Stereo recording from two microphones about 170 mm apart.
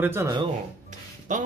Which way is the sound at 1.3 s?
50° right (ahead or behind).